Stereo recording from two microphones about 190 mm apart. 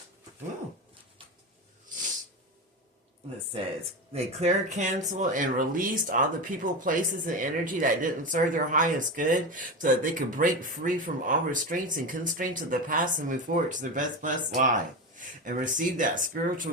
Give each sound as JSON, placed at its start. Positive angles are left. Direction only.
{"t": 3.5, "sound": "speech", "side_deg": -30}